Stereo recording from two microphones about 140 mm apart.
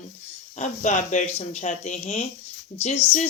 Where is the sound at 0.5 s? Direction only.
60° left (ahead or behind).